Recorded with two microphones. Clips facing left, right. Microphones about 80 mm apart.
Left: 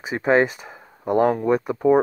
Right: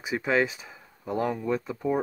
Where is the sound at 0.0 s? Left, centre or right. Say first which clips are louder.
Left 7 dB; left.